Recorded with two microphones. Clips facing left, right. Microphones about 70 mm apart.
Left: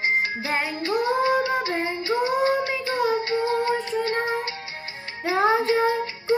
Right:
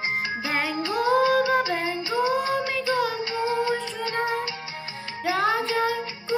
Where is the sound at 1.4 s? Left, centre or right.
Left.